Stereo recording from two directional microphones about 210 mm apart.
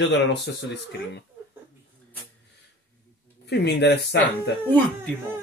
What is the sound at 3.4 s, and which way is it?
Speech, 55° left (ahead or behind).